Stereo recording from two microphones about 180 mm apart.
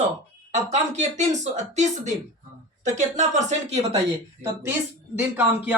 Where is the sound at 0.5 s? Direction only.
40° right (ahead or behind).